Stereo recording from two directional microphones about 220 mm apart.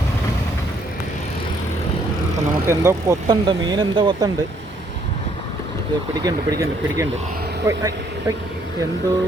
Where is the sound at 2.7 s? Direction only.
10° right (ahead or behind).